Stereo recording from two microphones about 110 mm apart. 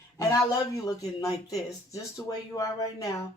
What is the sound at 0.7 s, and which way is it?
Speech, 30° left (ahead or behind).